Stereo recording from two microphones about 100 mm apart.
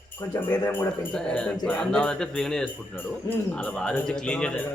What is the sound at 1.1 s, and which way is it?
A man's voice, 10° left (ahead or behind).